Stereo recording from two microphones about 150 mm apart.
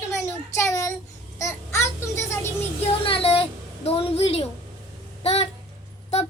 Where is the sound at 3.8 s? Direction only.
40° left (ahead or behind).